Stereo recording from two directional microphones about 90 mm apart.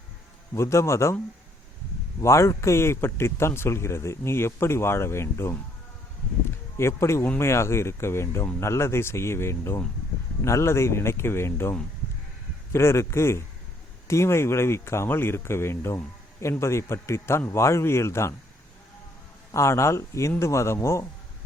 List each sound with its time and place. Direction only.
0.5 s a man's voice: 30° left (ahead or behind)
2.2 s speech: 35° left (ahead or behind)
6.7 s a man's voice: 30° left (ahead or behind)
19.5 s a man's voice: 35° left (ahead or behind)